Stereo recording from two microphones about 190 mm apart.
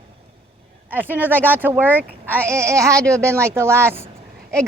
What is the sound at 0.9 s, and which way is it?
Speech, 10° right (ahead or behind).